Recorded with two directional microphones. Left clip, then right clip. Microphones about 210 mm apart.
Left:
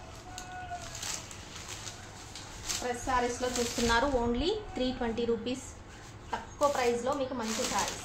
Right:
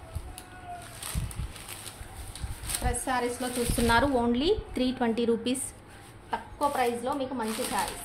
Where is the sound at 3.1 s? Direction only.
40° right (ahead or behind).